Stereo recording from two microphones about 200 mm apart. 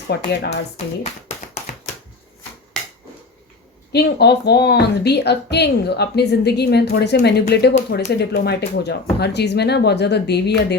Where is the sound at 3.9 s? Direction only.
55° left (ahead or behind).